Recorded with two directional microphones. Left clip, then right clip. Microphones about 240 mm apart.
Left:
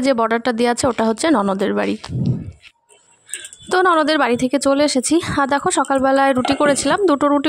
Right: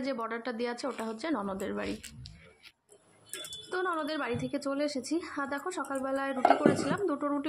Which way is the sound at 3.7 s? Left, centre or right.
Left.